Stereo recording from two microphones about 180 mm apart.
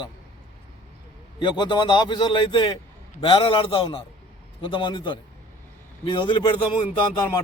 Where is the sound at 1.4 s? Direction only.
25° left (ahead or behind).